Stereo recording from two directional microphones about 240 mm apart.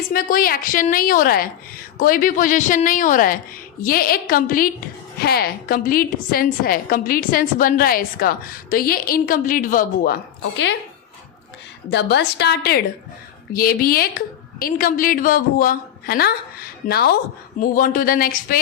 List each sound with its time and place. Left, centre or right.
0.1 s a woman's voice: left
11.9 s a woman's voice: left